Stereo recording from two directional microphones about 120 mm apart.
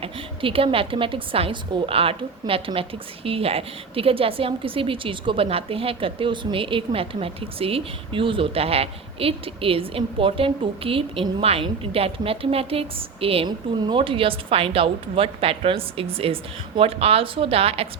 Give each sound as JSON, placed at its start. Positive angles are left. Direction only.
{"t": 0.0, "sound": "speech", "side_deg": -50}